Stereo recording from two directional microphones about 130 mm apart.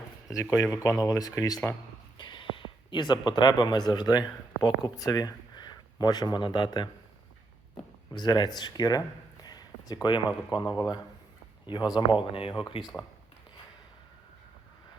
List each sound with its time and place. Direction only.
0.3 s speech: 25° left (ahead or behind)
2.1 s speech: 35° left (ahead or behind)
8.1 s a man's voice: 35° left (ahead or behind)
12.8 s speech: centre (ahead or behind)